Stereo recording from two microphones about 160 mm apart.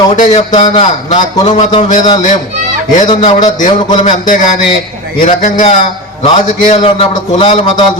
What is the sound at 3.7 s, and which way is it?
Speech, 25° left (ahead or behind).